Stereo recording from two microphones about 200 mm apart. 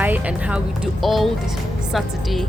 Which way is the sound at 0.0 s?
5° right (ahead or behind).